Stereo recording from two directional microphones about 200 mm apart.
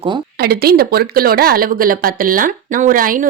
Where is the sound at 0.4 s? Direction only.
50° right (ahead or behind).